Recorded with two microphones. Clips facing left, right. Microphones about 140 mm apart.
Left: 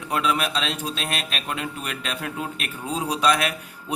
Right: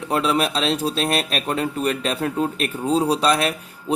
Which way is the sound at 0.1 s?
35° right (ahead or behind).